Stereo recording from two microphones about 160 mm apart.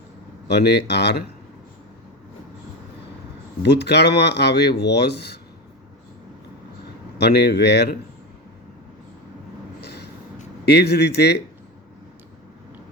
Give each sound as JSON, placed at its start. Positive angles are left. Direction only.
{"t": 0.4, "sound": "speech", "side_deg": 90}
{"t": 3.6, "sound": "speech", "side_deg": 90}
{"t": 7.2, "sound": "speech", "side_deg": 90}
{"t": 9.8, "sound": "a sound", "side_deg": 90}
{"t": 10.7, "sound": "speech", "side_deg": 90}